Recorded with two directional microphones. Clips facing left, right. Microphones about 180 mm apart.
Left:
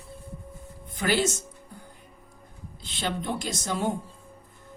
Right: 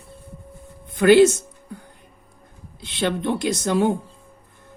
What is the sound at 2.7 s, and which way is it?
A woman's voice, 65° right (ahead or behind).